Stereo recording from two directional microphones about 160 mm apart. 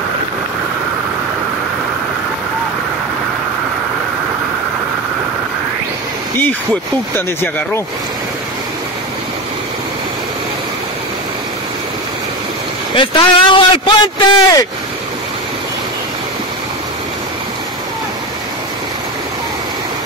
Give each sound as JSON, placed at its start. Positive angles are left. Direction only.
{"t": 6.3, "sound": "speech", "side_deg": 10}
{"t": 12.9, "sound": "a man's voice", "side_deg": 30}